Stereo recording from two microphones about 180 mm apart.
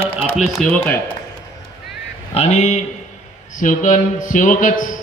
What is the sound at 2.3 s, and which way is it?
A man's voice, 40° left (ahead or behind).